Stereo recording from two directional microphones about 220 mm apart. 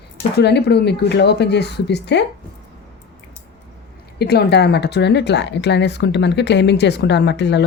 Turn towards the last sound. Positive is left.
turn(degrees=50)  # may be behind; listen again after turning